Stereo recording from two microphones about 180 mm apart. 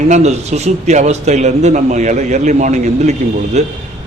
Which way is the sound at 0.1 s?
40° right (ahead or behind).